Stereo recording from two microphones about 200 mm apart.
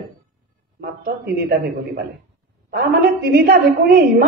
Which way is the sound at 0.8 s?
50° right (ahead or behind).